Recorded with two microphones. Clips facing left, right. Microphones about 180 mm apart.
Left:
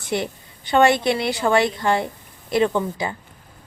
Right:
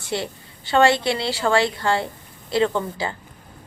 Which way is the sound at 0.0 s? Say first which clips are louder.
Left 2 dB; 20° left (ahead or behind).